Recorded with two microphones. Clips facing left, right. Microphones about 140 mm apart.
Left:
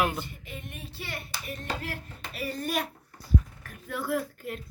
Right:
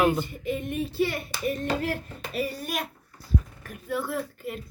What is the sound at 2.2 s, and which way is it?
Speech, 15° right (ahead or behind).